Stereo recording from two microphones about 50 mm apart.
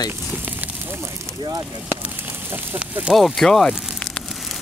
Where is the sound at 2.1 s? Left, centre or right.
Right.